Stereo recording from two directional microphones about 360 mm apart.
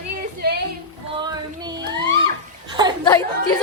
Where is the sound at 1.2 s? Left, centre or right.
Centre.